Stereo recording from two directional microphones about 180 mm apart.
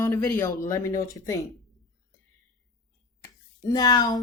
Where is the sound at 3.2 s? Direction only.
20° left (ahead or behind).